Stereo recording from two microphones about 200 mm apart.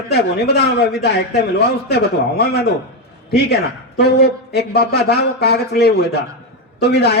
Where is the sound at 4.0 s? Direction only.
55° left (ahead or behind).